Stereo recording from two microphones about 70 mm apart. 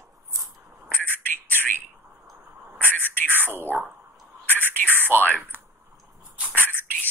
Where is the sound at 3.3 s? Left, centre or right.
Right.